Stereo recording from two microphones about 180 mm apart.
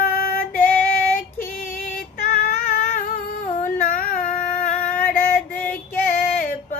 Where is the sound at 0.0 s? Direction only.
50° left (ahead or behind).